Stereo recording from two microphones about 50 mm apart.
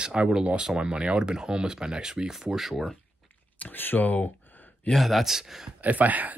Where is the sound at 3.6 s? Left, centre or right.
Left.